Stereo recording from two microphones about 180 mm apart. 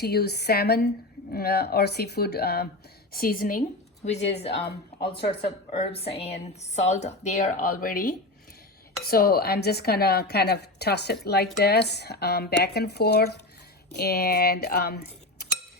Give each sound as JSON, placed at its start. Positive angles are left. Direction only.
{"t": 0.0, "sound": "a woman's voice", "side_deg": 60}
{"t": 4.0, "sound": "a woman's voice", "side_deg": 35}